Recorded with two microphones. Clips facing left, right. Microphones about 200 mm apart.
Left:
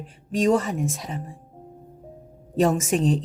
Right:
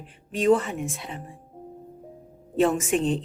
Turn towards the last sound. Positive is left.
turn(degrees=40)  # may be behind; listen again after turning